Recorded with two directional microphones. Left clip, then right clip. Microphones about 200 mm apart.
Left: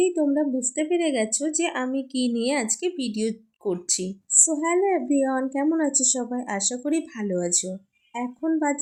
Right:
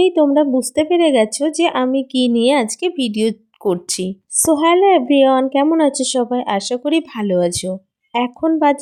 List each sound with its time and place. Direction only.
0.0 s speech: 40° right (ahead or behind)